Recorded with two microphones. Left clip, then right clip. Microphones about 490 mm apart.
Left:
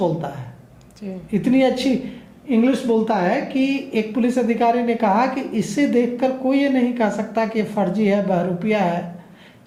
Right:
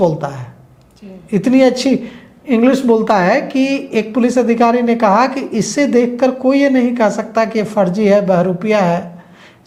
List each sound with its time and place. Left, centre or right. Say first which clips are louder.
1.3 s speech: right 6 dB; right